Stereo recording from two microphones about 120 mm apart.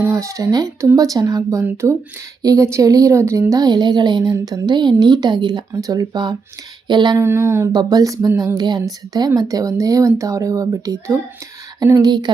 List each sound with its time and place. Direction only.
0.0 s speech: 25° right (ahead or behind)
7.2 s speech: 20° right (ahead or behind)
7.7 s speech: 35° right (ahead or behind)